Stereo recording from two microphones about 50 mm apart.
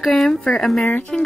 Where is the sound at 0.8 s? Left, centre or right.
Left.